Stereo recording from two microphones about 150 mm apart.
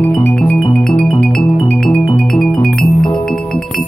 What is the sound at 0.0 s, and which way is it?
Music, 15° left (ahead or behind).